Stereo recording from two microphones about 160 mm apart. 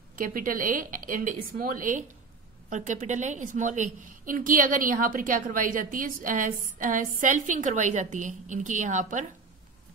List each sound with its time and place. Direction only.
0.1 s a woman's voice: 60° right (ahead or behind)